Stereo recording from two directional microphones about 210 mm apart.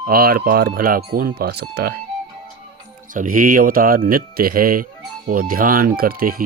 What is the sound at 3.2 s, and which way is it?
Speech, 40° right (ahead or behind).